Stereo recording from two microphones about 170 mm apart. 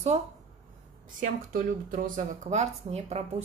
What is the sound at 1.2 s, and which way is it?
Speech, 50° right (ahead or behind).